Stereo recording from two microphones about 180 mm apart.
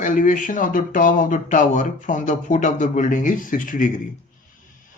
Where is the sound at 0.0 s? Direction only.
45° left (ahead or behind).